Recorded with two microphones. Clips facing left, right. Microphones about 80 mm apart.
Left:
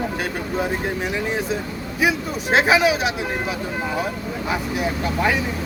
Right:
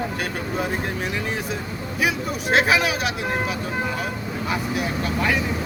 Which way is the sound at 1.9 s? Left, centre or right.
Left.